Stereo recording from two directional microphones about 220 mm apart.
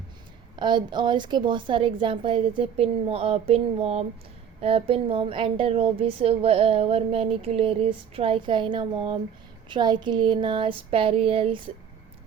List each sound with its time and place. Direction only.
0.5 s speech: 20° right (ahead or behind)